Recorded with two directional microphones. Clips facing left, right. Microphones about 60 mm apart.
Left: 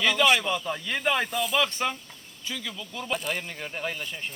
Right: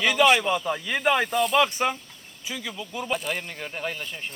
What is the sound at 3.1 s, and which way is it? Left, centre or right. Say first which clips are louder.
Speech: even; centre.